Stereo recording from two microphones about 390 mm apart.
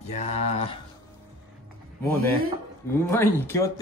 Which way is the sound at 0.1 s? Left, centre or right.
Centre.